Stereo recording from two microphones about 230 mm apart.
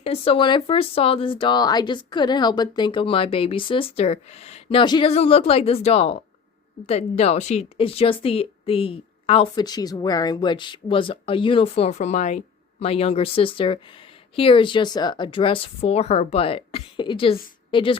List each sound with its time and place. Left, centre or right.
0.0 s a woman's voice: left